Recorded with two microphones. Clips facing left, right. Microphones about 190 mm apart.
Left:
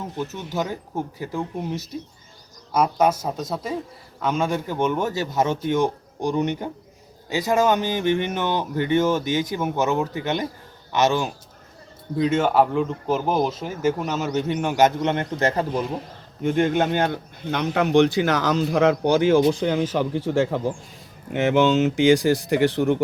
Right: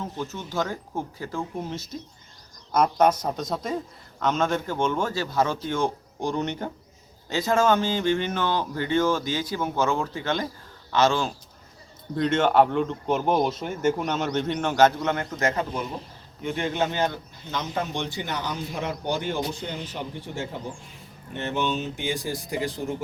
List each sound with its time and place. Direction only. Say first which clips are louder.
0.3 s a man's voice: left 2 dB; 15° left (ahead or behind)
12.1 s speech: left 1 dB; 5° left (ahead or behind); by 15.8 s 30° left (ahead or behind)
16.4 s speech: left 6 dB; 50° left (ahead or behind); by 23.0 s 70° left (ahead or behind)